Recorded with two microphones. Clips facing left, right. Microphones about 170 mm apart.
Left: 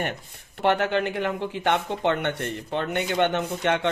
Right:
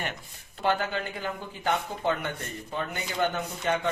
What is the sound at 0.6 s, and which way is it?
Speech, 70° left (ahead or behind).